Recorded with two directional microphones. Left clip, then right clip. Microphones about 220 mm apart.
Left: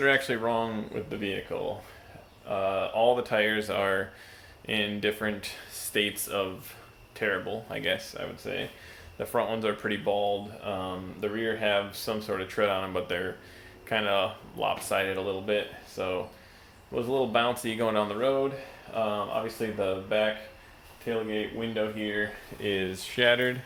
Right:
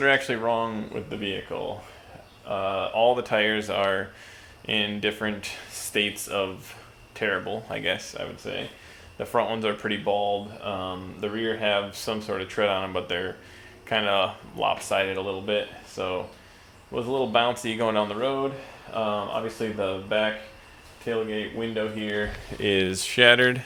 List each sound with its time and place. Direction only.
0.0 s speech: 10° right (ahead or behind)
22.6 s speech: 50° right (ahead or behind)